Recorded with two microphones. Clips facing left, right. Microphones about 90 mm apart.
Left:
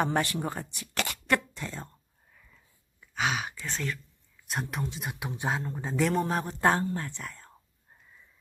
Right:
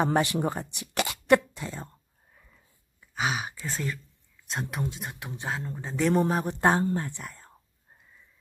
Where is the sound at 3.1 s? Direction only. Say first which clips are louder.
Even; 5° right (ahead or behind).